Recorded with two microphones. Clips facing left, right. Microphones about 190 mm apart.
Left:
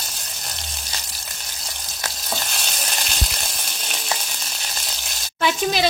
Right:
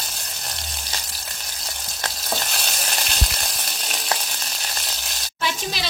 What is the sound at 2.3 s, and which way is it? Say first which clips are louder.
Frying: right 2 dB; centre (ahead or behind).